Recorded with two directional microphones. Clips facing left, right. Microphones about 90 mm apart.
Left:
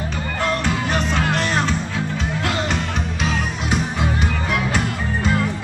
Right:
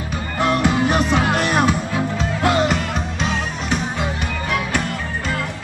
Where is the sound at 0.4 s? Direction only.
15° right (ahead or behind).